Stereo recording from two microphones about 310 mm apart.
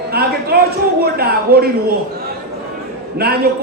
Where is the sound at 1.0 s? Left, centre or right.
Right.